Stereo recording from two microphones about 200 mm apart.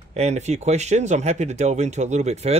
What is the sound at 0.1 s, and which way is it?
Speech, 35° right (ahead or behind).